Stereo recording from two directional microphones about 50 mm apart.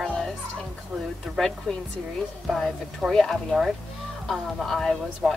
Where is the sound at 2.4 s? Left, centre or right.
Centre.